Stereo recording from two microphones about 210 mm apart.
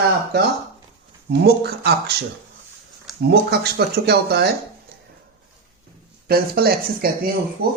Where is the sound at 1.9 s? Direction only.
50° right (ahead or behind).